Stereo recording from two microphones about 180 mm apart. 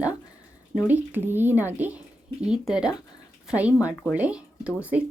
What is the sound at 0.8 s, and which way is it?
A woman's voice, 10° right (ahead or behind).